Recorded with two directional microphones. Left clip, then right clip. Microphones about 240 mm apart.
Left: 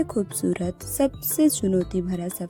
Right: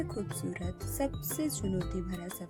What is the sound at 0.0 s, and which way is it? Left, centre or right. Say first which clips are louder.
Speech: left 12 dB; left.